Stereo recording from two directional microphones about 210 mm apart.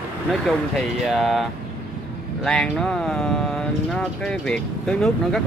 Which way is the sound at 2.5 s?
5° left (ahead or behind).